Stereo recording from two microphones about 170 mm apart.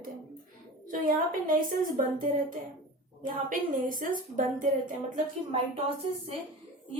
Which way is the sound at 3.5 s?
55° right (ahead or behind).